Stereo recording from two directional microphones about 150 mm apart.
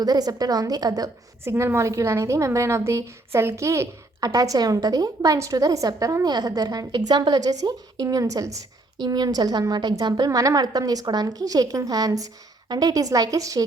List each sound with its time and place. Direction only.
0.0 s a woman's voice: 25° right (ahead or behind)